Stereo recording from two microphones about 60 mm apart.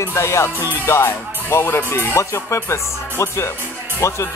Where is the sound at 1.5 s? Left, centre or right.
Left.